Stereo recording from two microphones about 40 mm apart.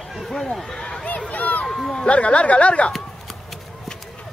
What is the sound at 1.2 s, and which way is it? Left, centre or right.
Run, left.